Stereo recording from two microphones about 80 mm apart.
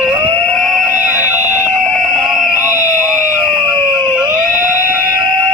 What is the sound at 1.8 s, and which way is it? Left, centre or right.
Fire alarm, centre.